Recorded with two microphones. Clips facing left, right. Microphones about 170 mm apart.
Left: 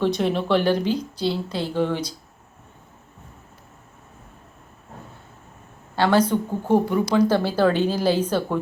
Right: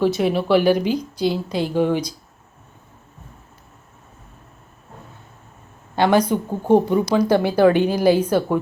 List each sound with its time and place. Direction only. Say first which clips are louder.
0.0 s a woman's voice: right 3 dB; 5° right (ahead or behind)
6.0 s a woman's voice: right 2 dB; 15° right (ahead or behind)